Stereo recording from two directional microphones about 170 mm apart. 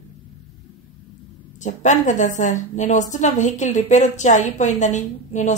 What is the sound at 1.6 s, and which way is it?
A woman's voice, 45° left (ahead or behind).